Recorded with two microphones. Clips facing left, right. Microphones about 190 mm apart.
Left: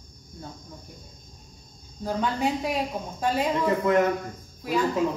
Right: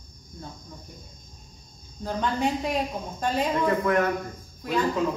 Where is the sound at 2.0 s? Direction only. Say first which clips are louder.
Even; 5° left (ahead or behind).